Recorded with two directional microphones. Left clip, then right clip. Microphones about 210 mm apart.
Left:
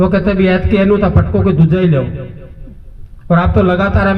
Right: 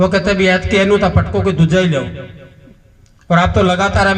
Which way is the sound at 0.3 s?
30° left (ahead or behind).